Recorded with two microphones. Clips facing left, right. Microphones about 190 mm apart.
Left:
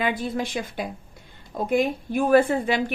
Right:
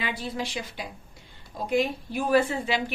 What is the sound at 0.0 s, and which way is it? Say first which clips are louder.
A woman's voice: left 6 dB; 50° left (ahead or behind).